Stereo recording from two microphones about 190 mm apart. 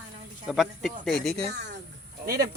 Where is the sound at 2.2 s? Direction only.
55° right (ahead or behind).